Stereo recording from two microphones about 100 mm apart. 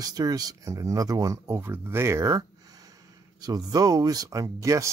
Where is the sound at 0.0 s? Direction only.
40° right (ahead or behind).